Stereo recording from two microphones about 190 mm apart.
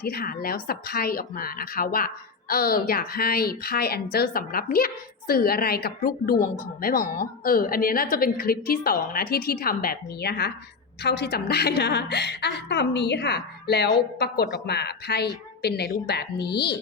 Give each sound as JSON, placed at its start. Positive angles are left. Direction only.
{"t": 0.0, "sound": "a woman's voice", "side_deg": 55}